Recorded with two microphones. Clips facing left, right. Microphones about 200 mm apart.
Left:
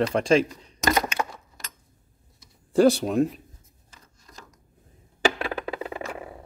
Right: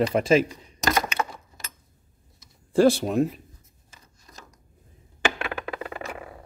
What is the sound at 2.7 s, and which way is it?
Speech, centre (ahead or behind).